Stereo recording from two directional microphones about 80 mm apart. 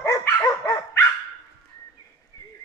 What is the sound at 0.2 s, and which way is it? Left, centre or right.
Dog, left.